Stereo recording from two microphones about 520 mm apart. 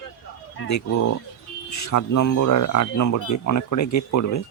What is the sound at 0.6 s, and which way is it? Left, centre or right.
Speech, left.